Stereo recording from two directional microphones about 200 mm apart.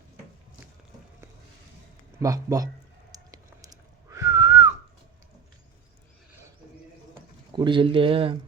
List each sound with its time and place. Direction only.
2.1 s a man's voice: 15° right (ahead or behind)
3.1 s whistling: 20° right (ahead or behind)
7.1 s speech: 25° right (ahead or behind)